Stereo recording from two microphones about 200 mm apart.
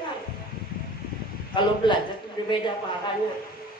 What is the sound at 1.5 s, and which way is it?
Speech, 25° left (ahead or behind).